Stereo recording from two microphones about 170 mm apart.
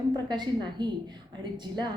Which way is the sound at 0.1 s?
25° right (ahead or behind).